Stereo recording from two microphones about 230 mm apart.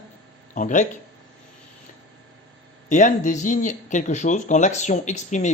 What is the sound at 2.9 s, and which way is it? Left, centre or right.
Speech, left.